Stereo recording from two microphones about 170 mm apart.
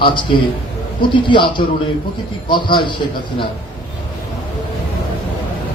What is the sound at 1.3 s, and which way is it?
A man's voice, 30° left (ahead or behind).